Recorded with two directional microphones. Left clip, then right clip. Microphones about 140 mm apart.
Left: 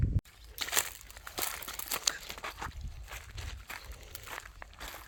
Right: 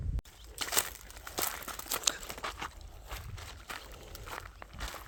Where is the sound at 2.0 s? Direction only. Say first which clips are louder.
Even; 40° right (ahead or behind).